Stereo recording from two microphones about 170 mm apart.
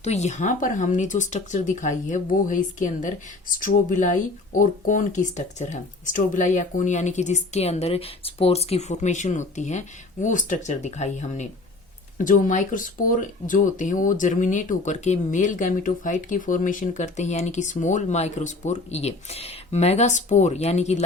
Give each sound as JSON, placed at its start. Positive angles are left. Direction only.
{"t": 0.0, "sound": "speech", "side_deg": 40}